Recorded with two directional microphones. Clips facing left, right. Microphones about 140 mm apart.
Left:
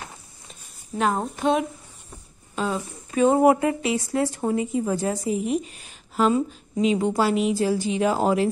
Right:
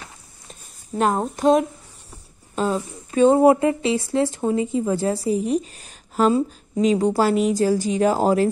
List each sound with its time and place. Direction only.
0.9 s a woman's voice: 40° right (ahead or behind)